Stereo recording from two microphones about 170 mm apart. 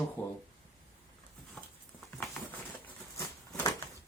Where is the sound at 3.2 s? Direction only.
15° left (ahead or behind).